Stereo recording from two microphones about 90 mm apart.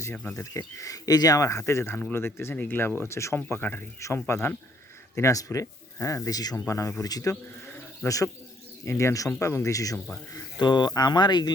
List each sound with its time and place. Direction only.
0.1 s speech: 10° left (ahead or behind)
0.3 s speech: 35° left (ahead or behind)
2.0 s speech: 20° left (ahead or behind)
3.0 s speech: 30° left (ahead or behind)
10.6 s speech: 55° left (ahead or behind)